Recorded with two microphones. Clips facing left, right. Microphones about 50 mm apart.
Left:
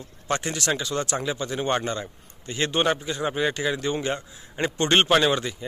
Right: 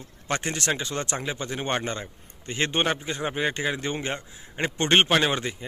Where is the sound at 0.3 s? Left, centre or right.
Right.